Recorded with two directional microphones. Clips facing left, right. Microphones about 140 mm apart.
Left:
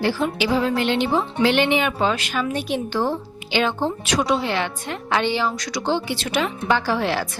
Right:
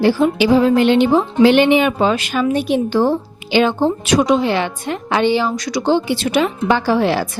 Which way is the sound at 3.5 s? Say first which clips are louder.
Right 7 dB; 10° right (ahead or behind).